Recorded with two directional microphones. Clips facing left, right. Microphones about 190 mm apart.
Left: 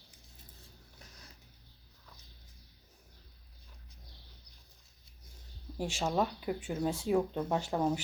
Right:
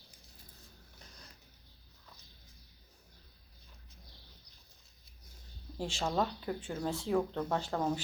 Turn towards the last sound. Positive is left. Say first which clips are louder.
# left 2 dB
turn(degrees=15)  # may be behind; listen again after turning